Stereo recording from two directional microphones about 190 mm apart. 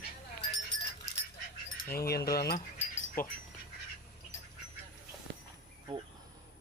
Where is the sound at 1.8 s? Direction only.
55° left (ahead or behind).